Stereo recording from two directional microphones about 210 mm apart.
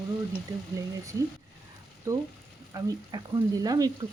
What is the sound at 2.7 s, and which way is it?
Speech, 20° right (ahead or behind).